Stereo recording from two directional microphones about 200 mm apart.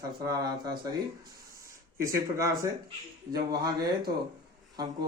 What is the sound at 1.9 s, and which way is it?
Speech, 15° right (ahead or behind).